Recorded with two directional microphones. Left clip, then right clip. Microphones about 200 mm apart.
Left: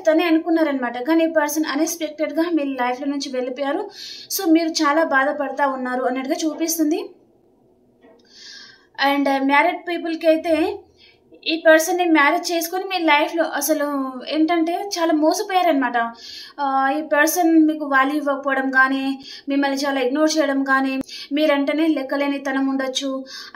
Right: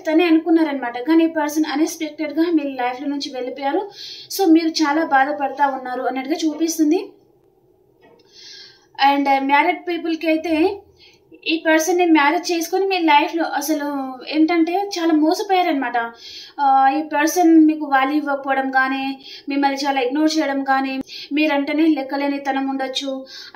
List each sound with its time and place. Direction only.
0.0 s a woman's voice: 20° left (ahead or behind)
8.9 s a woman's voice: 25° left (ahead or behind)